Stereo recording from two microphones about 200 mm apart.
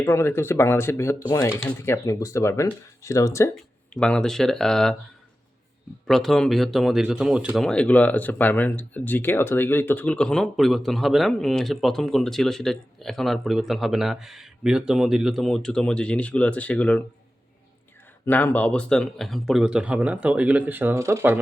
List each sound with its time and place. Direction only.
0.0 s speech: 10° left (ahead or behind)
3.5 s speech: centre (ahead or behind)
6.1 s speech: centre (ahead or behind)
18.3 s speech: 10° left (ahead or behind); by 21.4 s 10° right (ahead or behind)